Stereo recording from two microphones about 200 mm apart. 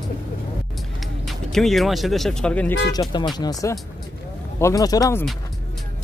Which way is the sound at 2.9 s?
20° left (ahead or behind).